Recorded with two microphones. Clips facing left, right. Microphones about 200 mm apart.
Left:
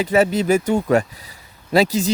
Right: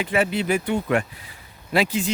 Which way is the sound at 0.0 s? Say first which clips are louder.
Left 6 dB; 40° left (ahead or behind).